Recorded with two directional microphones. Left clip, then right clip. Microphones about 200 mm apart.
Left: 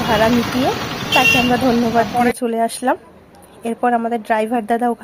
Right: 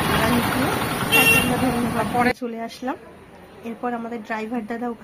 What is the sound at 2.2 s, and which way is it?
A woman's voice, 50° left (ahead or behind).